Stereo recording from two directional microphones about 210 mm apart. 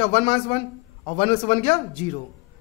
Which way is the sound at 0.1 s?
30° left (ahead or behind).